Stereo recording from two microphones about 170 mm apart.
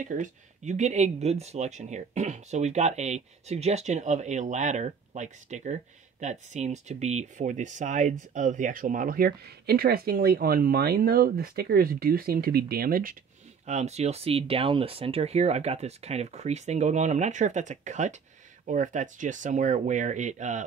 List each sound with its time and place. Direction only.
0.0 s speech: 50° right (ahead or behind)
13.7 s speech: 40° right (ahead or behind)